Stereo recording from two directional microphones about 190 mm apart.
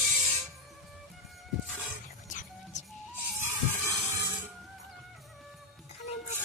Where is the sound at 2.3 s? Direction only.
40° left (ahead or behind).